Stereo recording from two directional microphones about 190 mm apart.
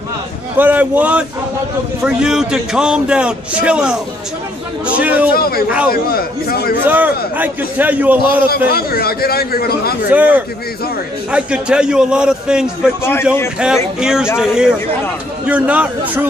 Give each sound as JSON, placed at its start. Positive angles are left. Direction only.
{"t": 0.6, "sound": "a man's voice", "side_deg": -10}
{"t": 5.3, "sound": "speech", "side_deg": 50}
{"t": 6.8, "sound": "a man's voice", "side_deg": -10}
{"t": 8.5, "sound": "speech", "side_deg": 55}
{"t": 10.0, "sound": "a man's voice", "side_deg": -10}
{"t": 13.0, "sound": "a man's voice", "side_deg": 10}
{"t": 13.9, "sound": "a man's voice", "side_deg": -5}